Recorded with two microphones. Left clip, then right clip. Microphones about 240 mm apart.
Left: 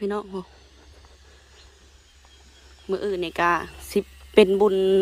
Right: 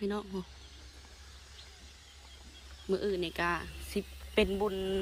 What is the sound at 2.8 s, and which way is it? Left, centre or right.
A woman's voice, centre.